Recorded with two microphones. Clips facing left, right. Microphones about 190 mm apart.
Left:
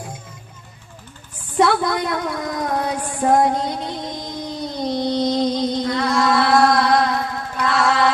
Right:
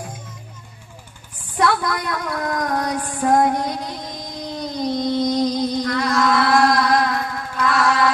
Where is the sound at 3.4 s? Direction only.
25° left (ahead or behind).